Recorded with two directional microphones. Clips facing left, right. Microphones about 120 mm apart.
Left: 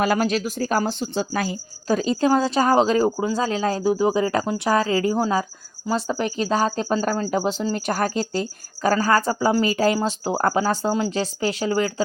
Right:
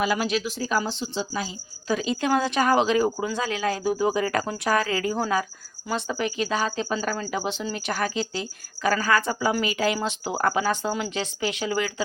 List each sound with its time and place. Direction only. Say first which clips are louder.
0.0 s speech: left 4 dB; 45° left (ahead or behind)
1.9 s speech: left 4 dB; 40° left (ahead or behind)